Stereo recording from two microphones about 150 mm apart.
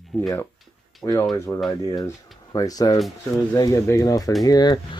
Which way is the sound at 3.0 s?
Centre (ahead or behind).